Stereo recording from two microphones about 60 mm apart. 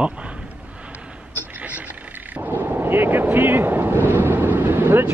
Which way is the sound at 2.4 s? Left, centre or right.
Right.